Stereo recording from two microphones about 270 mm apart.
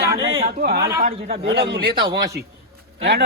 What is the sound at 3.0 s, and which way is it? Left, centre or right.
Speech, right.